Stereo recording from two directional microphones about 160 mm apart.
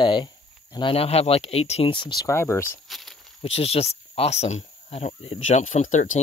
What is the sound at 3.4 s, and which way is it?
Speech, 40° left (ahead or behind).